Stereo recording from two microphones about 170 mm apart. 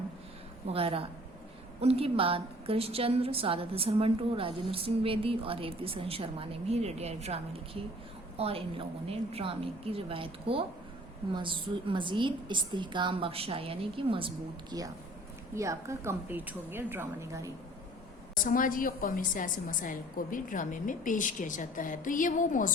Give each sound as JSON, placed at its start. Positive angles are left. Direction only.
{"t": 0.7, "sound": "a woman's voice", "side_deg": -35}
{"t": 15.5, "sound": "a woman's voice", "side_deg": -20}
{"t": 18.4, "sound": "a woman's voice", "side_deg": 55}